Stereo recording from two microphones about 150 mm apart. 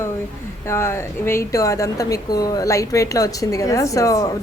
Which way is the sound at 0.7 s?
20° left (ahead or behind).